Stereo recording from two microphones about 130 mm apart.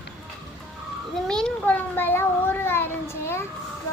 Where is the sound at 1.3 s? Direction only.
5° left (ahead or behind).